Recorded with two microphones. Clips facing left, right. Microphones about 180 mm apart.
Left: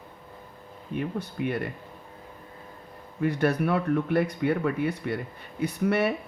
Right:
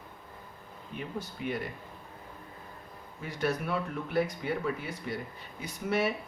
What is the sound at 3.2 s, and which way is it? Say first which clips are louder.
Speech: left 8 dB; 60° left (ahead or behind).